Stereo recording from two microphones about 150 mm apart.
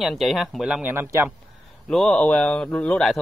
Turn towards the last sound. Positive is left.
turn(degrees=5)  # may be behind; listen again after turning